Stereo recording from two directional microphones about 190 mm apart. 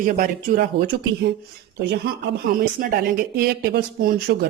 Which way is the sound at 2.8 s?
50° right (ahead or behind).